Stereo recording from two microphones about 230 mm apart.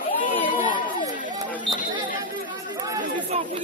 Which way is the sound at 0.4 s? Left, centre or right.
Left.